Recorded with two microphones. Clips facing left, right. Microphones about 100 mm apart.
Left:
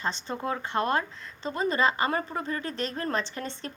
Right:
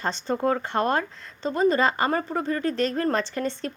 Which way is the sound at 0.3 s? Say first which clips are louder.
Right 7 dB; 45° right (ahead or behind).